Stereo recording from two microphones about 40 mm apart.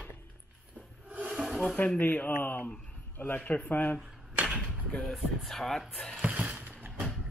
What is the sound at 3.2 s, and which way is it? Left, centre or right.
Speech, left.